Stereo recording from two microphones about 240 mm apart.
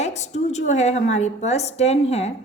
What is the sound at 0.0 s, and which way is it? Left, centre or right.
A woman's voice, left.